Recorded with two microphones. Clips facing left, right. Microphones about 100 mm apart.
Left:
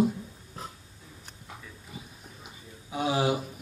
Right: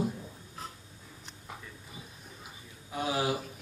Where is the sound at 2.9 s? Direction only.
25° left (ahead or behind).